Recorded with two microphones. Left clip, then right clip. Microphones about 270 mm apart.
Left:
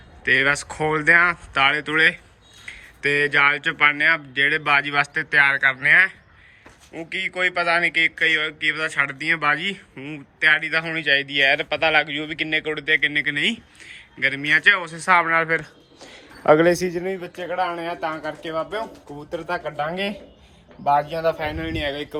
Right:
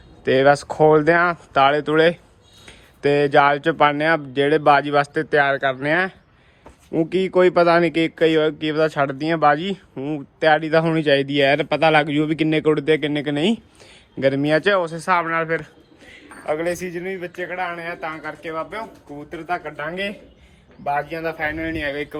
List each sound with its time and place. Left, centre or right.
0.3 s speech: centre
16.8 s speech: left